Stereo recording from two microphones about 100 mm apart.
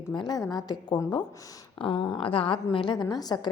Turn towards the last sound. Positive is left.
turn(degrees=40)  # may be behind; listen again after turning